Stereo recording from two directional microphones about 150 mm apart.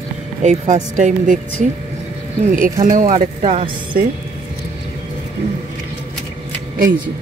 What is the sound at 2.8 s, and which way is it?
Speech, 60° right (ahead or behind).